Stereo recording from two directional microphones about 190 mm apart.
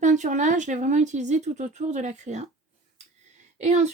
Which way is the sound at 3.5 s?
35° right (ahead or behind).